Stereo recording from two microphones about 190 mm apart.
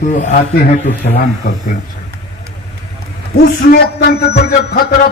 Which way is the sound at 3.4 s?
55° left (ahead or behind).